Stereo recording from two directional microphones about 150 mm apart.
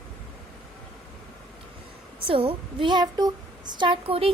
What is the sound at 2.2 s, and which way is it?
A woman's voice, 35° right (ahead or behind).